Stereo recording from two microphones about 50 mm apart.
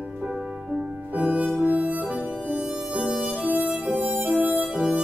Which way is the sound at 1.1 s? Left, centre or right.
Right.